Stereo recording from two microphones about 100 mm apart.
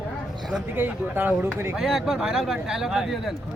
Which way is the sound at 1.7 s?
5° right (ahead or behind).